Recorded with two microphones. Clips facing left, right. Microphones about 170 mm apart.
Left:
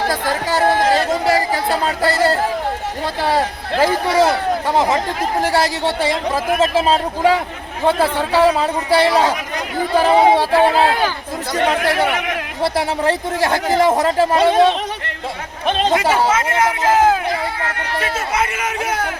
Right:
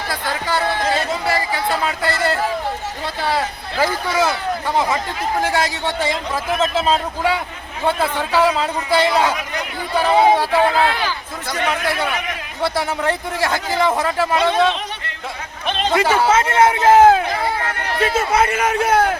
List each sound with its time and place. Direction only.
0.1 s speech: 40° left (ahead or behind)
3.8 s speech: 30° left (ahead or behind)
5.4 s speech: 35° left (ahead or behind)
10.1 s speech: 30° left (ahead or behind)
16.3 s a man's voice: 30° right (ahead or behind)